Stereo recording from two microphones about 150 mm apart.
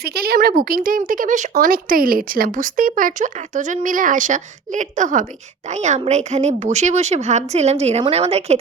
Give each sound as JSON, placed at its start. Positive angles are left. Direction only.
{"t": 0.0, "sound": "a woman's voice", "side_deg": -90}